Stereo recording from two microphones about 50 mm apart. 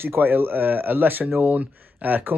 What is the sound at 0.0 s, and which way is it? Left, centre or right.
Speech, right.